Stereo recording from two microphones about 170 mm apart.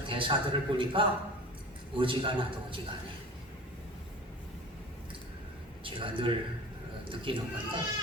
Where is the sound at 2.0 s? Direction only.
30° right (ahead or behind).